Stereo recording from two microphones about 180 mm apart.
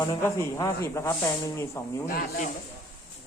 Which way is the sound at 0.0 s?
20° left (ahead or behind).